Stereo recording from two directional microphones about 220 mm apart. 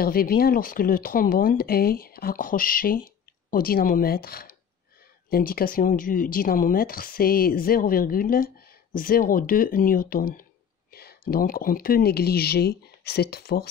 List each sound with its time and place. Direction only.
0.0 s speech: 40° left (ahead or behind)